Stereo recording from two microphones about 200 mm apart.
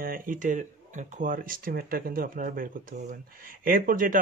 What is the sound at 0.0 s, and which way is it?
Speech, 45° right (ahead or behind).